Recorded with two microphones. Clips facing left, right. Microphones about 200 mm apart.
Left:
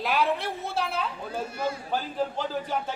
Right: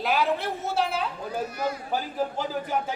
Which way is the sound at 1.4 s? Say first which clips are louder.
Even; 25° left (ahead or behind).